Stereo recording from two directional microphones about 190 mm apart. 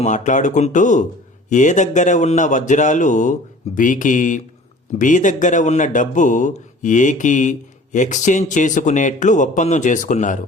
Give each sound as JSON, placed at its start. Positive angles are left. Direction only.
{"t": 0.0, "sound": "speech", "side_deg": 40}